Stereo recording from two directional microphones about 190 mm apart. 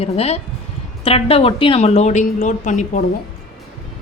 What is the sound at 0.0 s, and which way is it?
A woman's voice, 35° left (ahead or behind).